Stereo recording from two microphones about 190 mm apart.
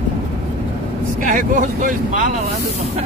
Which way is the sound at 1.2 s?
45° right (ahead or behind).